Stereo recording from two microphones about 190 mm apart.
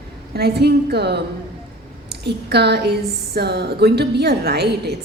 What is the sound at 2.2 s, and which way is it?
A woman's voice, 60° right (ahead or behind).